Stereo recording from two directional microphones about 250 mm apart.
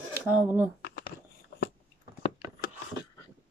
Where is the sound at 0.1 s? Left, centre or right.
Centre.